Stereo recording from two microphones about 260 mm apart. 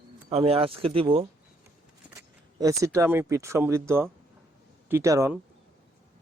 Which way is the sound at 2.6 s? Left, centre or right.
Centre.